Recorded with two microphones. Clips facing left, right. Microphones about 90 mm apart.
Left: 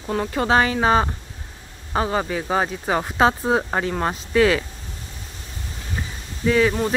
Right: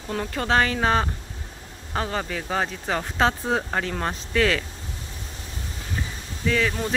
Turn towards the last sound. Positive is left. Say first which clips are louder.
# left 6 dB
turn(degrees=20)  # may be behind; listen again after turning